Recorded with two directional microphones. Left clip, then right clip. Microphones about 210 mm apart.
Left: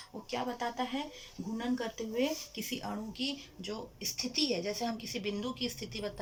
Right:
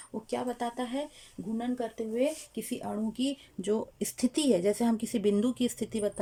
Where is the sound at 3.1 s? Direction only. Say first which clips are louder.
Right 4 dB; 35° right (ahead or behind).